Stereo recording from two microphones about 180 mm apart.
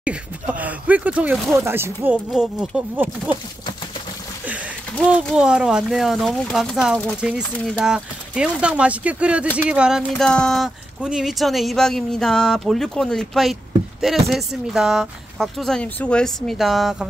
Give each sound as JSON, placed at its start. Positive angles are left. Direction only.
{"t": 0.0, "sound": "speech", "side_deg": -5}
{"t": 1.6, "sound": "speech", "side_deg": -15}
{"t": 5.1, "sound": "speech", "side_deg": -5}